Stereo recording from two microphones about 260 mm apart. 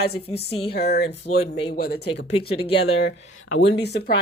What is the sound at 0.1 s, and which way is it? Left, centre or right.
Speech, left.